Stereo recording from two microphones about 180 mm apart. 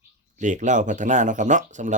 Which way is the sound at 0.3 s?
45° right (ahead or behind).